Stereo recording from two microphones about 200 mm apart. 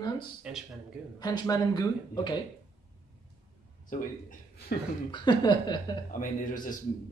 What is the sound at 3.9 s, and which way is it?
Speech, 40° left (ahead or behind).